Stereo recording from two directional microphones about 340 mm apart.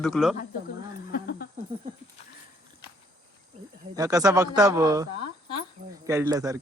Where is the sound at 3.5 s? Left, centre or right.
Centre.